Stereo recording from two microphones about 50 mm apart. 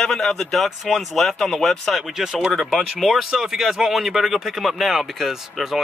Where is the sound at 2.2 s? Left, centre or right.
Centre.